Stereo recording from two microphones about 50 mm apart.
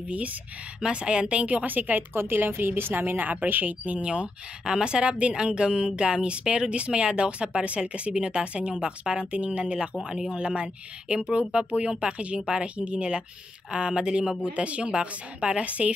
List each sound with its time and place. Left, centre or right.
0.1 s a woman's voice: right